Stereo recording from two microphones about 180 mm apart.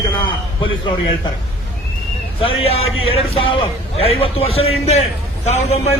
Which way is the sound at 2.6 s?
30° left (ahead or behind).